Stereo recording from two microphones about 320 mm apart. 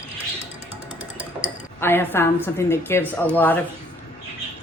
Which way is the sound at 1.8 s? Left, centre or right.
Centre.